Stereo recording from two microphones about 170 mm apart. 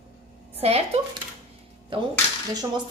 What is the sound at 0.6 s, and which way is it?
Speech, 35° right (ahead or behind).